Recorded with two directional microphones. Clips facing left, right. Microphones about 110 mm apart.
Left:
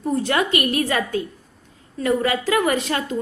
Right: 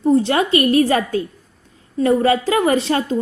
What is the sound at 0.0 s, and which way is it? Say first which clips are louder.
A woman's voice: right 6 dB; 25° right (ahead or behind).